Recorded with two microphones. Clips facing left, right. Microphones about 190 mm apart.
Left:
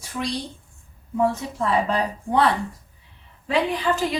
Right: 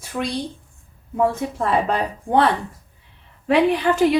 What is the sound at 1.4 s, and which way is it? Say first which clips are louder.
A woman's voice: right 2 dB; 60° right (ahead or behind).